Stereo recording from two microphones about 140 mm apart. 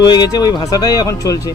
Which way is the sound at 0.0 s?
30° left (ahead or behind).